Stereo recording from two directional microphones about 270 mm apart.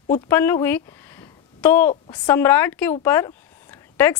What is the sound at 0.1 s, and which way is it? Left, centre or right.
A woman's voice, centre.